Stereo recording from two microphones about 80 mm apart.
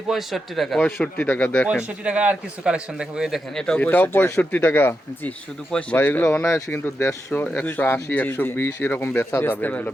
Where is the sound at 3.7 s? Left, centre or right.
Left.